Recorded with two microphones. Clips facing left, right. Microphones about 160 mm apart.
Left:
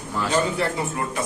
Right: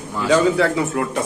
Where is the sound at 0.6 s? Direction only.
80° right.